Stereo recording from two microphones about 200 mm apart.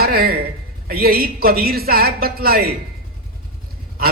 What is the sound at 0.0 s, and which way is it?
A man's voice, 50° right (ahead or behind).